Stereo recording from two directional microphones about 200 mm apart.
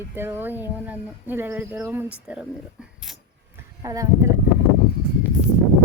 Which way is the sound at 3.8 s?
15° right (ahead or behind).